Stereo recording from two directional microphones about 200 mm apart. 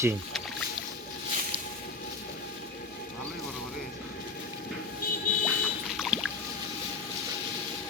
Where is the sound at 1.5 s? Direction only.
25° right (ahead or behind).